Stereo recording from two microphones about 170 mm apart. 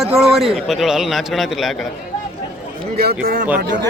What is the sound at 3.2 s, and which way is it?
Speech, 60° right (ahead or behind).